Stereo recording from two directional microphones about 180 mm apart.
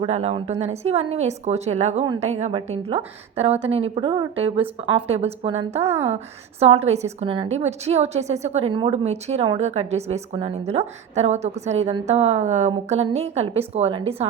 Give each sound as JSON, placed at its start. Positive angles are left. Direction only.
{"t": 0.0, "sound": "a woman's voice", "side_deg": -35}